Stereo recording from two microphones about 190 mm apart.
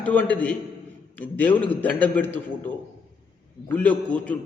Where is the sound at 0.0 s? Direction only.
10° left (ahead or behind).